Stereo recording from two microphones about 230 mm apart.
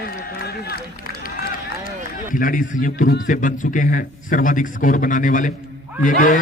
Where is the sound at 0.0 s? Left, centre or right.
Left.